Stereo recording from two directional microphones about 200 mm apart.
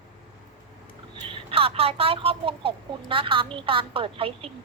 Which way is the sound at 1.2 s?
25° right (ahead or behind).